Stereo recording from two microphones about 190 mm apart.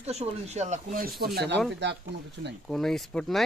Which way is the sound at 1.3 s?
60° right (ahead or behind).